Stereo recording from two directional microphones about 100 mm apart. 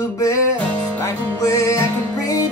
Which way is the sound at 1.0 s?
30° left (ahead or behind).